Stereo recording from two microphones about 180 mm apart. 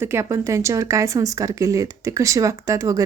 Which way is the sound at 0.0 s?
15° right (ahead or behind).